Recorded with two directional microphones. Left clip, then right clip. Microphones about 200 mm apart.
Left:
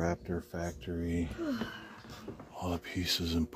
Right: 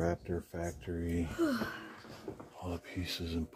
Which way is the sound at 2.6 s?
25° left (ahead or behind).